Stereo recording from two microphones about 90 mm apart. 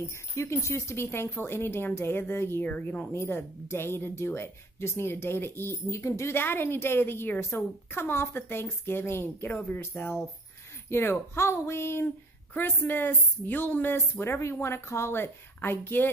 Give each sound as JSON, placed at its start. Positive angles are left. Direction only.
{"t": 0.1, "sound": "a woman's voice", "side_deg": 30}
{"t": 3.1, "sound": "a woman's voice", "side_deg": 25}